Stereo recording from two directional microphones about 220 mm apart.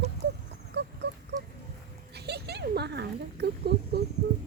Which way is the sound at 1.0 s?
50° right (ahead or behind).